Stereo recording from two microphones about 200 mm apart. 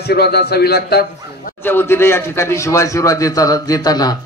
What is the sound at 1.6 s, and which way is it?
A man's voice, 10° left (ahead or behind).